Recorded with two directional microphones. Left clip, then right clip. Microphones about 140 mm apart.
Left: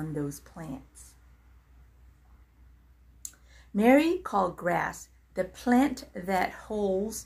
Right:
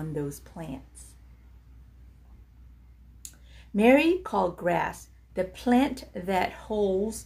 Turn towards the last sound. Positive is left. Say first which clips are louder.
# right 3 dB
turn(degrees=-5)  # may be behind; listen again after turning